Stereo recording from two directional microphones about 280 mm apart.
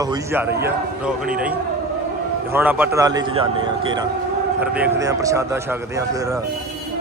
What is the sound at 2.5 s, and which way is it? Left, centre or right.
A man's voice, centre.